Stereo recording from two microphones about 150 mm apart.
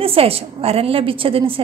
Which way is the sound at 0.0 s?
40° right (ahead or behind).